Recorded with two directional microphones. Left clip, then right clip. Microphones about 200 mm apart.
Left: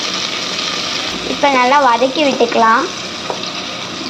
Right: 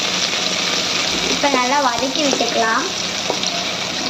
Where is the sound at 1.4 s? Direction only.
35° left (ahead or behind).